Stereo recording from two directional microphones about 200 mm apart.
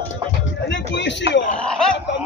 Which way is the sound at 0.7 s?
60° left (ahead or behind).